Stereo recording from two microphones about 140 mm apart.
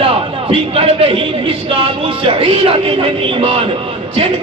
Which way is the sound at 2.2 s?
40° right (ahead or behind).